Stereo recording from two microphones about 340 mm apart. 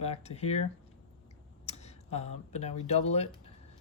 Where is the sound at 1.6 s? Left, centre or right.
Centre.